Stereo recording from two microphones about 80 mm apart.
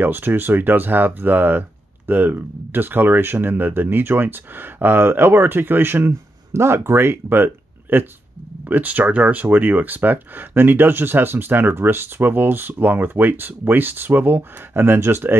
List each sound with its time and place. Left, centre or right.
0.0 s speech: right